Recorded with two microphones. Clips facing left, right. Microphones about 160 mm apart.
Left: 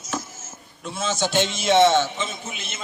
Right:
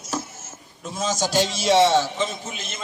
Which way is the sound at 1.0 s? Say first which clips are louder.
Right 1 dB; 40° right (ahead or behind).